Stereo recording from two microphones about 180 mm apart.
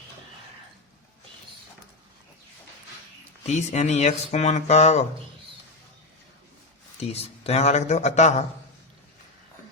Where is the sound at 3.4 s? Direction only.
40° left (ahead or behind).